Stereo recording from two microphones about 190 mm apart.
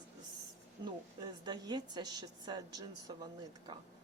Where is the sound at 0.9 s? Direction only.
20° right (ahead or behind).